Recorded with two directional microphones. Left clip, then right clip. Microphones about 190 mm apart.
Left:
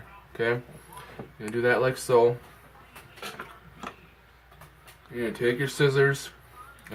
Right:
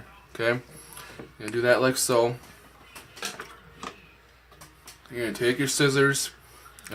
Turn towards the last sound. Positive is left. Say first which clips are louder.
# right 1 dB
turn(degrees=-25)  # may be behind; listen again after turning